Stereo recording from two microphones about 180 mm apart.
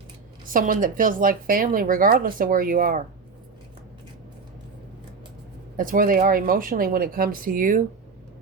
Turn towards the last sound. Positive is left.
turn(degrees=-50)  # may be behind; listen again after turning